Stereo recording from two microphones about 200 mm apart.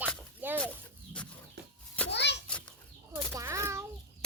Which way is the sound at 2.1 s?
60° left (ahead or behind).